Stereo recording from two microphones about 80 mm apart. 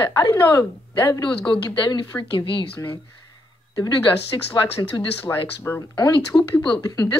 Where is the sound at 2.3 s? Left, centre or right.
Left.